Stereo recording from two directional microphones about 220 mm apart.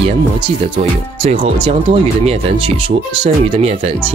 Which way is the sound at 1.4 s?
25° right (ahead or behind).